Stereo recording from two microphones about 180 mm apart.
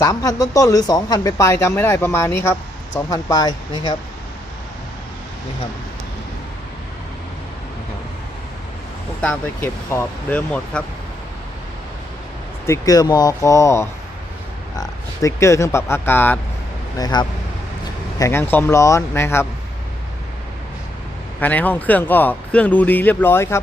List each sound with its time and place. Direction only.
0.0 s speech: 20° left (ahead or behind)
9.2 s speech: 10° left (ahead or behind)
12.6 s speech: 15° left (ahead or behind)
17.0 s speech: 25° left (ahead or behind)
18.2 s speech: 15° left (ahead or behind)
21.4 s speech: 10° left (ahead or behind)